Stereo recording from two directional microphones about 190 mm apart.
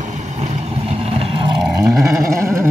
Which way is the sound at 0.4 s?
30° right (ahead or behind).